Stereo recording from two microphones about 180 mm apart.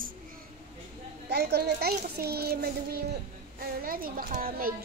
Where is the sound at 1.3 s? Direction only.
65° right (ahead or behind).